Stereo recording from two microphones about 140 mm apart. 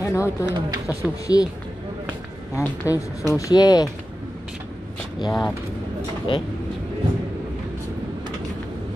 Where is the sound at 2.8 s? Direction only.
20° left (ahead or behind).